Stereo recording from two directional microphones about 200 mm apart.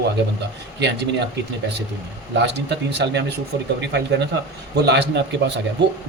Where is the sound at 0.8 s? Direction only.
60° right (ahead or behind).